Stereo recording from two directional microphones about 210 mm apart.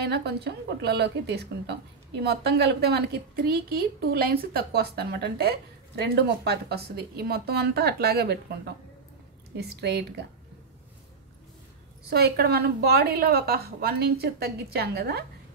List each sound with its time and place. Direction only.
0.0 s a woman's voice: 50° right (ahead or behind)
9.6 s a woman's voice: 50° right (ahead or behind)
12.1 s a woman's voice: 50° right (ahead or behind)